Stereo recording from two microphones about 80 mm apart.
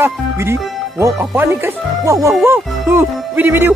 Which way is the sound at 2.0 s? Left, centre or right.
Right.